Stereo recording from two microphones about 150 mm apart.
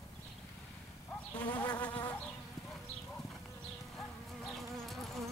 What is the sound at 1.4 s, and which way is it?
Insect, 10° left (ahead or behind).